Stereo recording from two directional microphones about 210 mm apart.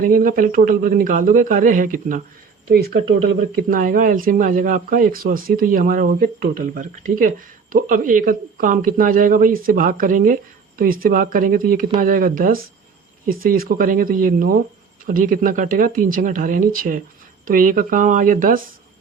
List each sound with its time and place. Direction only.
0.0 s speech: 40° right (ahead or behind)